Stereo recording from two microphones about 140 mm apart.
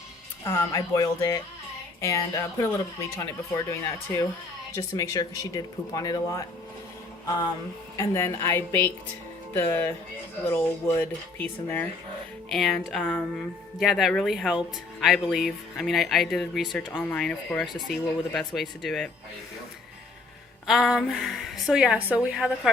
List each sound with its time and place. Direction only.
0.4 s speech: 20° left (ahead or behind)
7.9 s speech: 20° left (ahead or behind)
12.5 s speech: centre (ahead or behind)
20.7 s speech: centre (ahead or behind)